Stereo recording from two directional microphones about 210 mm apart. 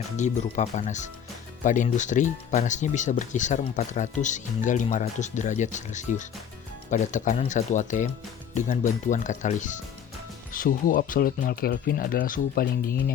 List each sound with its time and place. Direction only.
0.2 s speech: 35° left (ahead or behind)